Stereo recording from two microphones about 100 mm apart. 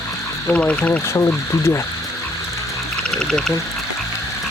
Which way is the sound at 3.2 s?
5° left (ahead or behind).